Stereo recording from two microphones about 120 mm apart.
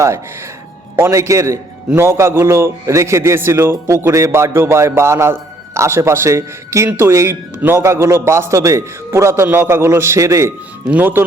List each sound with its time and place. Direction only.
0.9 s a man's voice: 20° right (ahead or behind)